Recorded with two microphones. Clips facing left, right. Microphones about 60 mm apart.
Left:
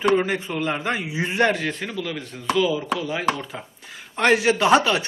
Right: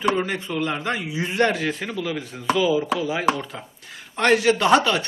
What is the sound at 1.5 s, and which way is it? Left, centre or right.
A man's voice, centre.